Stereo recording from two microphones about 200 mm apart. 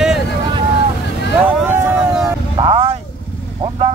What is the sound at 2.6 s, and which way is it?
Vehicle, 25° right (ahead or behind).